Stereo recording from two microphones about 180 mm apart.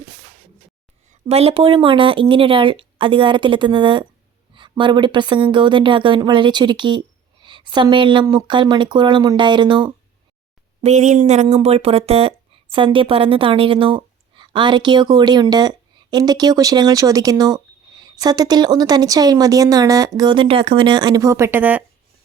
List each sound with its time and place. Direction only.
1.3 s speech: 35° right (ahead or behind)
10.8 s speech: 40° right (ahead or behind); by 21.8 s 10° right (ahead or behind)